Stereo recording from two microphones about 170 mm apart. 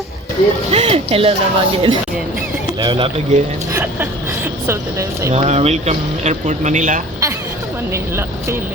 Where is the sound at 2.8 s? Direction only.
30° right (ahead or behind).